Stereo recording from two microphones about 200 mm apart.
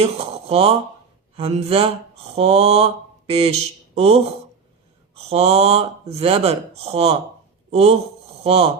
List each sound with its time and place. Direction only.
0.0 s speech: 30° right (ahead or behind)